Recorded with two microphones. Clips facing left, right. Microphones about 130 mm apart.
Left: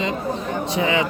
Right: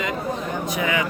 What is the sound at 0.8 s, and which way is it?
Speech, 25° left (ahead or behind).